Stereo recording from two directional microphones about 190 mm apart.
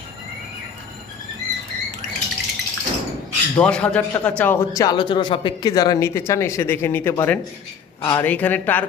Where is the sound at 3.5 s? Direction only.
5° left (ahead or behind).